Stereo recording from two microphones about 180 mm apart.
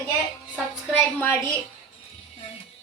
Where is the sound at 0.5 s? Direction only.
5° left (ahead or behind).